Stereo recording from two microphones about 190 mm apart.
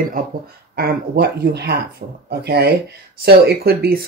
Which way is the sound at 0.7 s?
55° right (ahead or behind).